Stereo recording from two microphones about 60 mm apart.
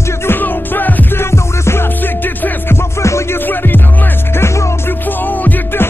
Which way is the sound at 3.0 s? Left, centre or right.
Left.